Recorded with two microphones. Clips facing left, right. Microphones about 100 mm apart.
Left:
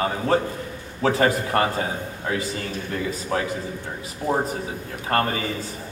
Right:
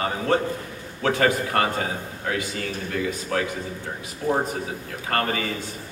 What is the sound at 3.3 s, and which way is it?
Speech, 30° left (ahead or behind).